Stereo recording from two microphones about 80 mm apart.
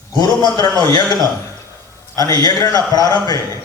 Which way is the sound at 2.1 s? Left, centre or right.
Left.